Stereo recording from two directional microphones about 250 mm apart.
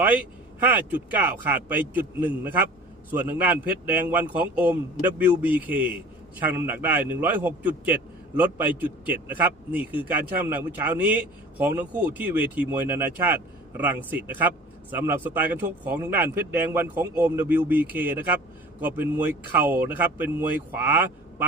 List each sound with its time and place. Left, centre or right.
0.0 s a man's voice: centre